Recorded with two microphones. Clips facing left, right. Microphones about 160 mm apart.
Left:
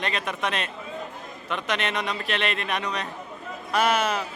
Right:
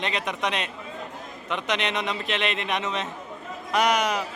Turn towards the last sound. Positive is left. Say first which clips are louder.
# even
turn(degrees=-15)  # may be behind; listen again after turning